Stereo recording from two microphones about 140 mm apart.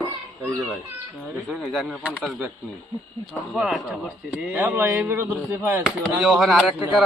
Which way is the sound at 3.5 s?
5° right (ahead or behind).